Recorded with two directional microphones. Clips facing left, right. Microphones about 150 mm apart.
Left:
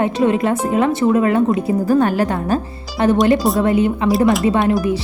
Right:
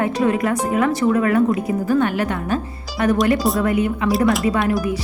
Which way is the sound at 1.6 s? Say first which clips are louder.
Left 3 dB; 35° left (ahead or behind).